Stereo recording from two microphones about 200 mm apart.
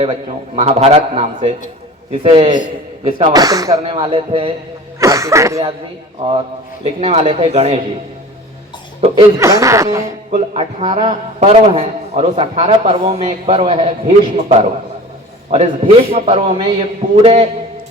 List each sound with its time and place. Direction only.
0.0 s a man's voice: 30° right (ahead or behind)
4.9 s speech: 15° right (ahead or behind)
6.2 s a man's voice: 30° right (ahead or behind)
9.0 s speech: 30° right (ahead or behind)
9.4 s speech: 15° right (ahead or behind)
10.3 s a man's voice: 30° right (ahead or behind)